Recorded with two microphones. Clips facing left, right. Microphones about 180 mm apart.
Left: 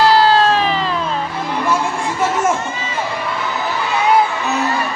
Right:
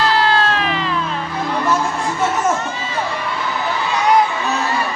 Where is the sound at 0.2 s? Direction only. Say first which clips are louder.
Left 4 dB; 35° left (ahead or behind).